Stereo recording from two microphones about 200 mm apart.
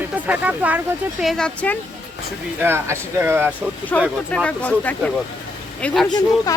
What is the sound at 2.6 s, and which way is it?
Speech, 10° right (ahead or behind).